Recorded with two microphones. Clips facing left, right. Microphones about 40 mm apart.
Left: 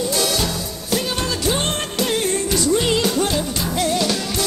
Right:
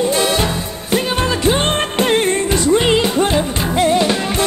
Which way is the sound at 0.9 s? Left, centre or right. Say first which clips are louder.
Right 5 dB; right.